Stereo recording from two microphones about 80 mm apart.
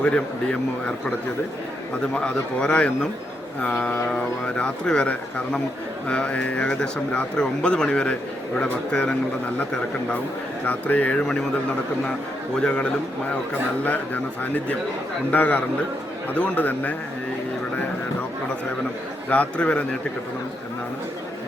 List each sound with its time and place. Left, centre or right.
0.0 s speech: centre
2.1 s speech: centre
10.7 s speech: left
11.2 s speech: centre
12.5 s speech: centre
19.3 s speech: centre